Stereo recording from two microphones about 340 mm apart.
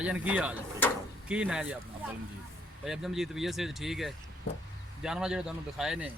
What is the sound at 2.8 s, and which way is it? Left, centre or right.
Speech, centre.